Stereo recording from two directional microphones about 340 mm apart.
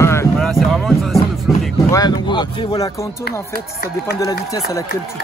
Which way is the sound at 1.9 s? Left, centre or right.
Centre.